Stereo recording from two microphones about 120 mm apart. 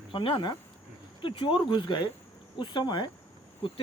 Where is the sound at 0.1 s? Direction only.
45° left (ahead or behind).